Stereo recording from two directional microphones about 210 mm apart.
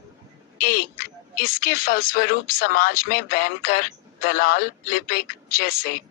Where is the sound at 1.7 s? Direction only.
45° left (ahead or behind).